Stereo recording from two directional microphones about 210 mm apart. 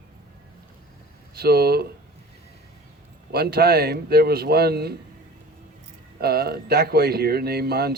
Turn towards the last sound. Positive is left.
turn(degrees=-50)  # may be behind; listen again after turning